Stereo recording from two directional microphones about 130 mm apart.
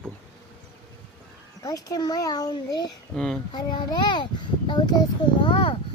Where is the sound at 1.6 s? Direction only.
25° left (ahead or behind).